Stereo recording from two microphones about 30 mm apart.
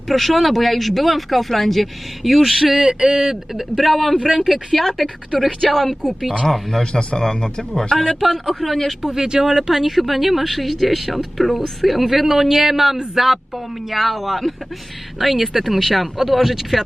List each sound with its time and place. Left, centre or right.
0.1 s speech: centre
2.7 s a man's voice: right
3.5 s speech: centre
3.8 s a woman's voice: centre
6.9 s speech: left
8.2 s speech: centre
9.0 s speech: right
9.8 s speech: centre